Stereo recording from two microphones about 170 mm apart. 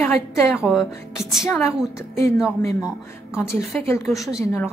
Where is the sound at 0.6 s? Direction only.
Centre (ahead or behind).